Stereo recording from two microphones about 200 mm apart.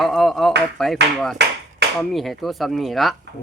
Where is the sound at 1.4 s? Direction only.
55° right (ahead or behind).